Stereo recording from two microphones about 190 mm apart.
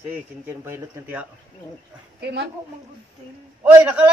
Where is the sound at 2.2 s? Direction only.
60° right (ahead or behind).